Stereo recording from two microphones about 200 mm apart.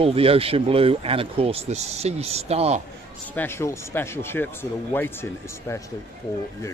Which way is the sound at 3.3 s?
10° left (ahead or behind).